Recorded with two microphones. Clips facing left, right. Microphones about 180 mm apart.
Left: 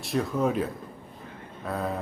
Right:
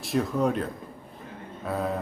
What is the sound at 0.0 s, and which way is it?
Mantra, centre (ahead or behind).